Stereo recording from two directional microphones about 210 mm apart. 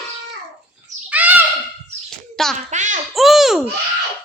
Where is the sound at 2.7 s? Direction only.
35° right (ahead or behind).